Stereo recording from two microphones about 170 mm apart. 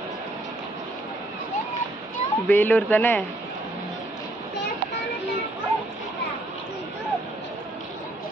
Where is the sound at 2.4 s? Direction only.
10° left (ahead or behind).